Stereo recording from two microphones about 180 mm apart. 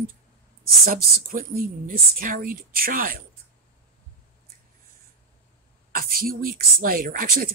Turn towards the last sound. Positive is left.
turn(degrees=-50)  # may be behind; listen again after turning